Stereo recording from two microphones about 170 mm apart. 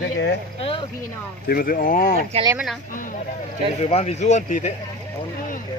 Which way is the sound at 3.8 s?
35° left (ahead or behind).